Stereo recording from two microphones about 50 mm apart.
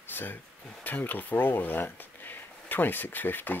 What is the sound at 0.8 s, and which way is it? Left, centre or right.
Speech, left.